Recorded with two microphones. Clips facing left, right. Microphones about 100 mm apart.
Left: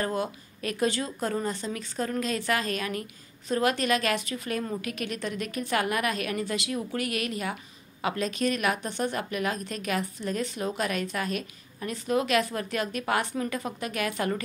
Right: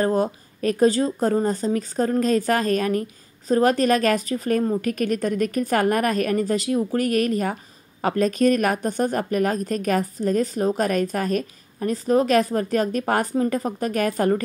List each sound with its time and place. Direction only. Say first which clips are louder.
0.0 s speech: right 8 dB; 40° right (ahead or behind)